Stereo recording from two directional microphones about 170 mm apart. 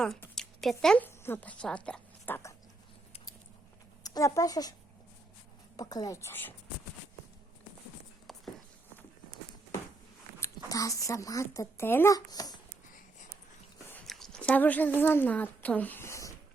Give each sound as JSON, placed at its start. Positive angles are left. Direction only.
{"t": 0.3, "sound": "speech", "side_deg": 0}
{"t": 4.0, "sound": "speech", "side_deg": 20}
{"t": 5.7, "sound": "speech", "side_deg": 25}
{"t": 8.3, "sound": "walk", "side_deg": 0}
{"t": 10.4, "sound": "speech", "side_deg": 20}
{"t": 13.9, "sound": "speech", "side_deg": 5}